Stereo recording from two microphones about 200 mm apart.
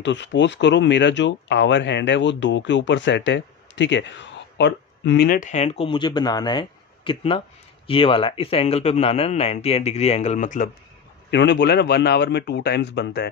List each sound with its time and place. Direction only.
0.0 s speech: 65° left (ahead or behind); by 10.7 s 40° left (ahead or behind)
11.2 s a man's voice: 60° left (ahead or behind)